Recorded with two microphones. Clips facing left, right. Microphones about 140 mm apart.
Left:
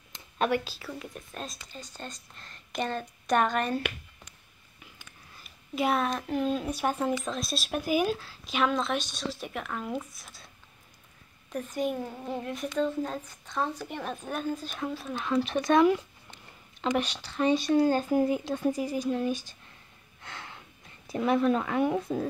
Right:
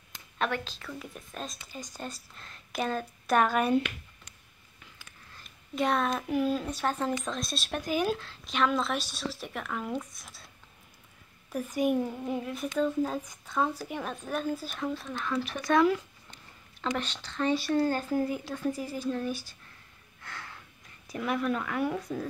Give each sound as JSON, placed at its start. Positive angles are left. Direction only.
{"t": 0.5, "sound": "a woman's voice", "side_deg": 10}
{"t": 1.8, "sound": "a woman's voice", "side_deg": -10}
{"t": 5.4, "sound": "a sound", "side_deg": 5}
{"t": 6.2, "sound": "speech", "side_deg": -5}
{"t": 6.6, "sound": "a woman's voice", "side_deg": 10}
{"t": 11.5, "sound": "speech", "side_deg": -10}
{"t": 15.1, "sound": "speech", "side_deg": 20}
{"t": 20.2, "sound": "gasp", "side_deg": 20}
{"t": 21.1, "sound": "speech", "side_deg": 25}